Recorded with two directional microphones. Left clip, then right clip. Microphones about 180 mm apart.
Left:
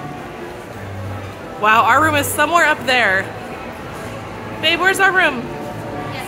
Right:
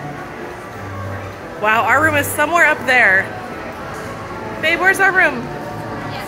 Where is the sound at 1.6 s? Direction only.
25° left (ahead or behind).